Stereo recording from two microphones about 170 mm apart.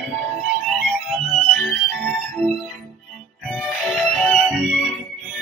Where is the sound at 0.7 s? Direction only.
5° left (ahead or behind).